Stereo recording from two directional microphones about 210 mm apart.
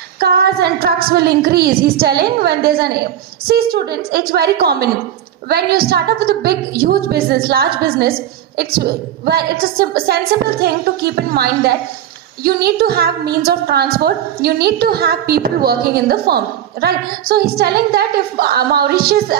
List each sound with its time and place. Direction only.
0.2 s a woman's voice: 45° right (ahead or behind)